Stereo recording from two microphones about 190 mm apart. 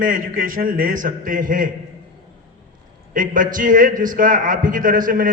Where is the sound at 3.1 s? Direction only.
45° right (ahead or behind).